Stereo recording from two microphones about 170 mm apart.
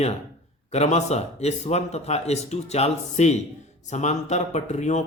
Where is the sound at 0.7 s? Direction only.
40° left (ahead or behind).